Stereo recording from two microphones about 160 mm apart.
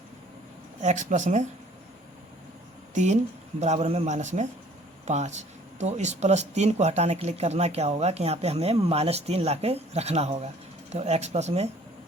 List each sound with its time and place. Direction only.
0.8 s speech: 50° right (ahead or behind)
2.9 s speech: 50° right (ahead or behind)